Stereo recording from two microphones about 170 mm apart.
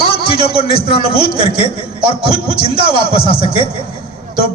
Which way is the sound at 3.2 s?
35° left (ahead or behind).